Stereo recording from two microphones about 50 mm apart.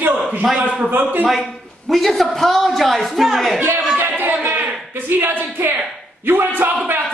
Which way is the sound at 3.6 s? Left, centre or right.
Right.